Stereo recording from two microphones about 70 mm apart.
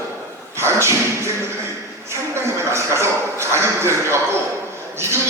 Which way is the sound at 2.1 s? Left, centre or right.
Right.